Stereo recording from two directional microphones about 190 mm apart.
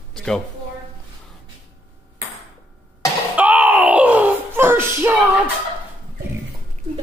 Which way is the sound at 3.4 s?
10° right (ahead or behind).